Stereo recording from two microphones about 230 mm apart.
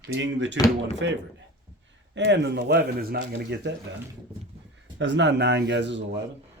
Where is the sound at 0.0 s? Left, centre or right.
Right.